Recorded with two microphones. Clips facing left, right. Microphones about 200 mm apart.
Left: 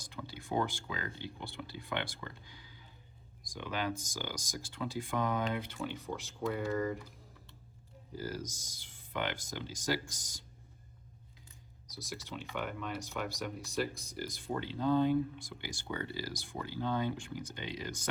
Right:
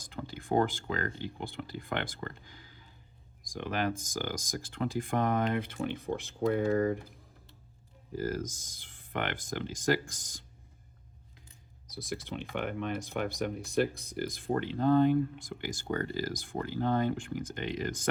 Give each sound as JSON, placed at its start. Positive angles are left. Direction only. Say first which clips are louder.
{"t": 0.0, "sound": "speech", "louder": "right 4 dB", "side_deg": -50}
{"t": 8.1, "sound": "speech", "louder": "right 6 dB", "side_deg": -50}
{"t": 11.9, "sound": "speech", "louder": "right 6 dB", "side_deg": -55}